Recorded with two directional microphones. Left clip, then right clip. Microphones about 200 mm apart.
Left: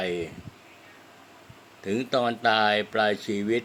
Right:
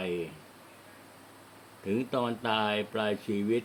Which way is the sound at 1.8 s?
5° right (ahead or behind).